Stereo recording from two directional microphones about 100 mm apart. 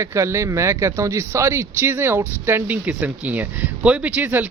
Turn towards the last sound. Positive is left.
turn(degrees=-20)  # may be behind; listen again after turning